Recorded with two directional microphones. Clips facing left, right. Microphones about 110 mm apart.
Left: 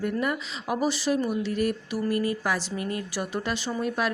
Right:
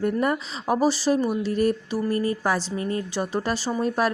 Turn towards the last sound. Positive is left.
turn(degrees=-35)  # may be behind; listen again after turning